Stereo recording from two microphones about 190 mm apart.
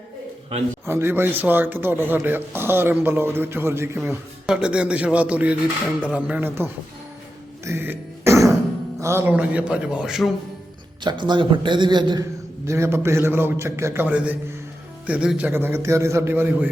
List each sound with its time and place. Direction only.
0.9 s speech: 10° right (ahead or behind)
7.6 s music: 10° right (ahead or behind)
9.0 s speech: 15° right (ahead or behind)
11.0 s speech: 25° right (ahead or behind)